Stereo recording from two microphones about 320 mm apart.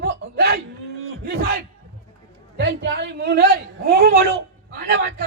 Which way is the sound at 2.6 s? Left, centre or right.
Right.